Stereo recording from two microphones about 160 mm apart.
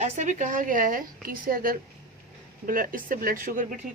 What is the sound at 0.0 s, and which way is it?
A woman's voice, 50° right (ahead or behind).